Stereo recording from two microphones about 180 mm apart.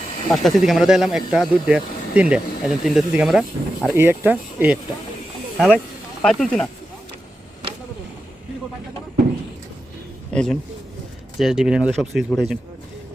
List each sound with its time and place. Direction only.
0.3 s speech: centre (ahead or behind)
5.5 s speech: 5° left (ahead or behind)
10.3 s a man's voice: 5° left (ahead or behind)